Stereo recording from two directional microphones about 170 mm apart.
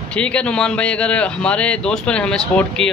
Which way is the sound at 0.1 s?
5° left (ahead or behind).